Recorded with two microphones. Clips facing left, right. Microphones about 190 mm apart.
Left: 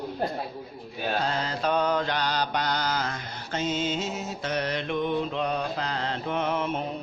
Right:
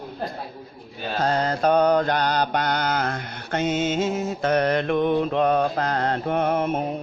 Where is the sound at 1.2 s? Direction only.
45° right (ahead or behind).